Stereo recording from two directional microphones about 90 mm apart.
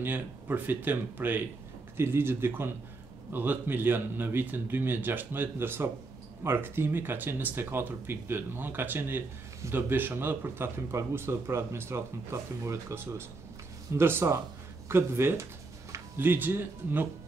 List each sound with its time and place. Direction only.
0.0 s speech: 20° right (ahead or behind)